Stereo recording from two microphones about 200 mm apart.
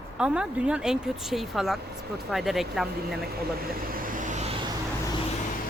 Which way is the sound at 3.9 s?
45° right (ahead or behind).